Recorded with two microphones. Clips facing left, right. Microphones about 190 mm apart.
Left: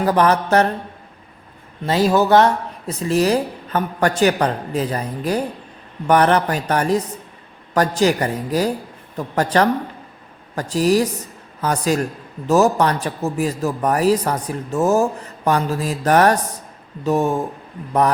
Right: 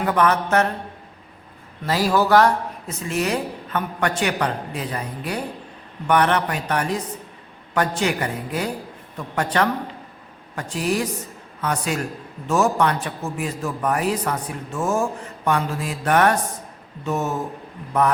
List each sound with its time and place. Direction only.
0.0 s a man's voice: 35° left (ahead or behind)
1.9 s a man's voice: 25° left (ahead or behind)